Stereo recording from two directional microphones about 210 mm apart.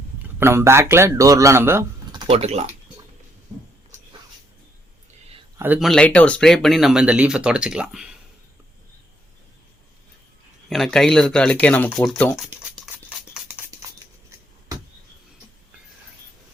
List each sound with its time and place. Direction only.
0.2 s speech: 10° right (ahead or behind)
2.2 s speech: 30° right (ahead or behind)
5.5 s speech: 10° right (ahead or behind)
10.7 s speech: centre (ahead or behind)
12.5 s a sound: 5° right (ahead or behind)